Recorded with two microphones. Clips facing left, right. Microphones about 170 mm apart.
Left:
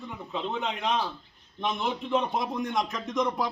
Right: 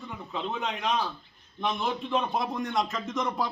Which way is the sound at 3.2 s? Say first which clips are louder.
Left 3 dB; centre (ahead or behind).